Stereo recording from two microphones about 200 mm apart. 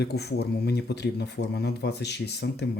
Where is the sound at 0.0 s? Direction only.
55° left (ahead or behind).